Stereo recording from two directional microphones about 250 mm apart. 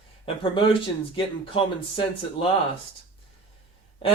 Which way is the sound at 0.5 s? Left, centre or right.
Centre.